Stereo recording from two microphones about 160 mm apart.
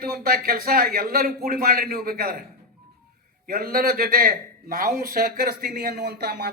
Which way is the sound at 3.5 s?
70° right (ahead or behind).